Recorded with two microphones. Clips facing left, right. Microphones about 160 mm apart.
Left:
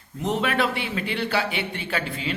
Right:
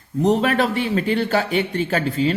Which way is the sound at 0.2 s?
40° right (ahead or behind).